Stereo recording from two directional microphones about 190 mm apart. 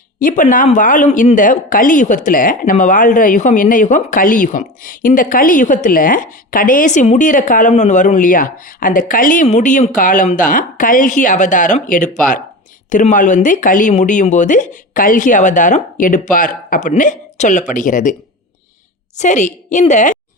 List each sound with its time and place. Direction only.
0.2 s speech: 45° left (ahead or behind)
19.1 s speech: 40° left (ahead or behind)